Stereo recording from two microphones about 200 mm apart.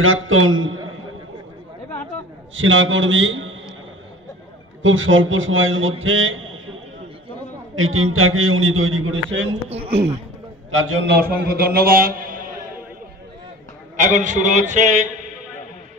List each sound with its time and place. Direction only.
0.0 s a man's voice: 90° right
2.5 s a man's voice: 75° right (ahead or behind)
4.8 s a man's voice: 75° right (ahead or behind)
9.7 s a man's voice: 30° right (ahead or behind)
10.7 s a man's voice: 85° right
11.1 s a man's voice: 50° right (ahead or behind)
13.9 s a man's voice: 40° right (ahead or behind)